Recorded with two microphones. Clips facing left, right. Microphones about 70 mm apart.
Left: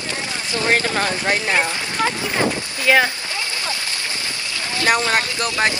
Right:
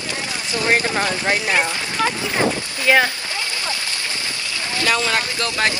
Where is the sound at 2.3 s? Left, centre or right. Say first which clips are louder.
Right 1 dB; centre.